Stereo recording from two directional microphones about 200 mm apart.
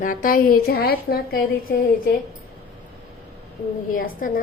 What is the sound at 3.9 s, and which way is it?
Speech, 45° left (ahead or behind).